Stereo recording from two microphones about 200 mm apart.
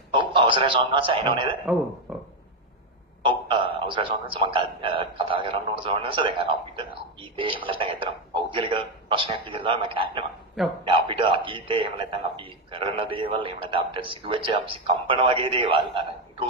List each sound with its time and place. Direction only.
0.1 s a man's voice: 25° right (ahead or behind)
3.2 s a man's voice: 25° right (ahead or behind)
10.6 s a man's voice: centre (ahead or behind)
10.9 s a man's voice: 25° right (ahead or behind)